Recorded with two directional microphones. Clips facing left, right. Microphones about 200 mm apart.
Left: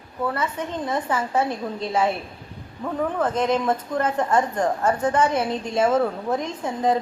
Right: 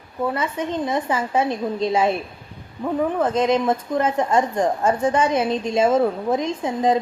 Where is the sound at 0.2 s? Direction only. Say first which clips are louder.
Right 2 dB; 15° right (ahead or behind).